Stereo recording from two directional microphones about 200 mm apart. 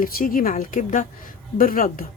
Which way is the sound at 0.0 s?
45° left (ahead or behind).